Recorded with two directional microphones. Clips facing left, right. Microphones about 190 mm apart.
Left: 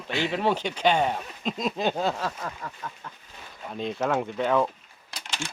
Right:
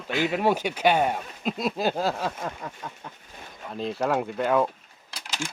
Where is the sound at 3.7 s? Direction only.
5° right (ahead or behind).